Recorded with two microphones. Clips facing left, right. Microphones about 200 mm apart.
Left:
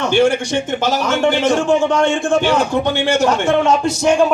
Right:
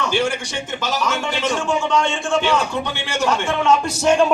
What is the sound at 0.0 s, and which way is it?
A man's voice, 55° left (ahead or behind).